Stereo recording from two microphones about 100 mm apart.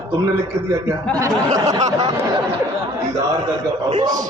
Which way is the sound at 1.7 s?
35° right (ahead or behind).